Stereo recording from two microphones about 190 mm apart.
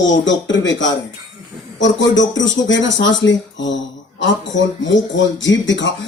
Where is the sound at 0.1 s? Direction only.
75° left (ahead or behind).